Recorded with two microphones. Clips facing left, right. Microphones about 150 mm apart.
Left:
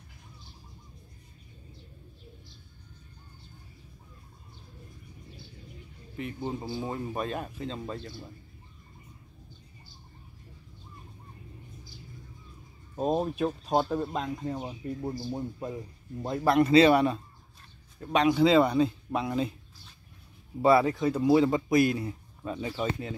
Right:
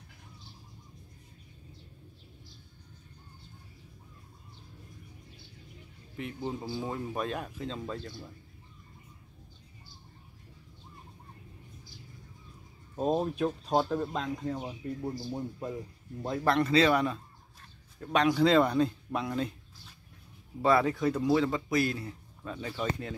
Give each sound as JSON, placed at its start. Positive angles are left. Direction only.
{"t": 6.4, "sound": "speech", "side_deg": 15}
{"t": 6.8, "sound": "speech", "side_deg": 0}
{"t": 12.9, "sound": "speech", "side_deg": 10}
{"t": 14.6, "sound": "speech", "side_deg": 20}
{"t": 20.6, "sound": "speech", "side_deg": 5}